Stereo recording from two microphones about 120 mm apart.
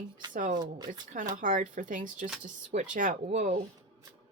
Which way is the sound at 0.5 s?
35° right (ahead or behind).